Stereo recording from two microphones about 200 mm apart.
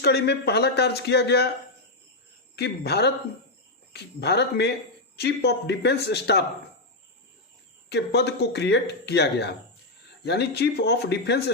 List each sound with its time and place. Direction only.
0.0 s speech: 55° left (ahead or behind)
2.6 s speech: 55° left (ahead or behind)
7.9 s speech: 55° left (ahead or behind)